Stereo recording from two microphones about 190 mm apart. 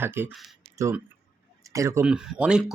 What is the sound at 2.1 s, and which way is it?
Speech, 5° right (ahead or behind).